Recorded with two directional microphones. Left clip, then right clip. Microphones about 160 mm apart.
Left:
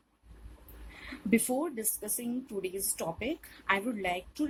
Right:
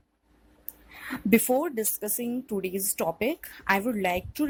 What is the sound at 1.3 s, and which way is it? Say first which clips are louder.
Speech: right 7 dB; 50° right (ahead or behind).